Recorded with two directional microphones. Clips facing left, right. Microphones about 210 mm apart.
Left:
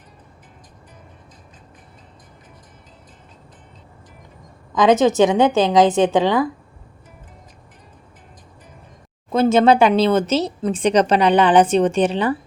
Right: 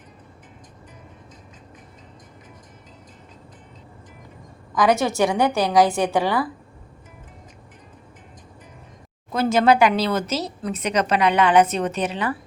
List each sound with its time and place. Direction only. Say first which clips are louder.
4.7 s speech: left 5 dB; 20° left (ahead or behind)
9.3 s speech: left 4 dB; 25° left (ahead or behind)